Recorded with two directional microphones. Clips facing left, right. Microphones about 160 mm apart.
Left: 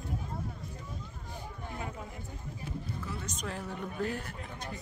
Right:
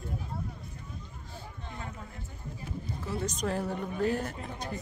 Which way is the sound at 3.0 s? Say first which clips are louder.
Right 7 dB; 35° right (ahead or behind).